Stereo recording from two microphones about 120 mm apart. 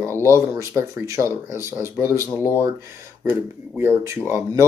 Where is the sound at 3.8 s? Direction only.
20° right (ahead or behind).